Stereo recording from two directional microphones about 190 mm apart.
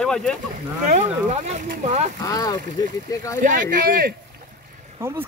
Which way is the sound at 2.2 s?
20° left (ahead or behind).